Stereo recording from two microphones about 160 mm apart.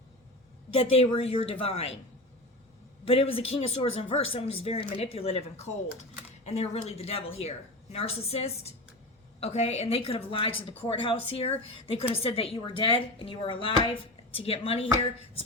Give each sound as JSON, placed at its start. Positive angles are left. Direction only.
{"t": 0.8, "sound": "a woman's voice", "side_deg": 40}
{"t": 3.0, "sound": "a woman's voice", "side_deg": 35}